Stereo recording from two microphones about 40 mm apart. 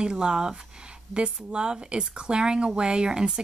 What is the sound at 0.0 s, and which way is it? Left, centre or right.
Speech, right.